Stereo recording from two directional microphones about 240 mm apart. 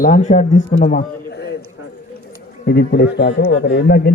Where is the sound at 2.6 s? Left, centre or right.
Left.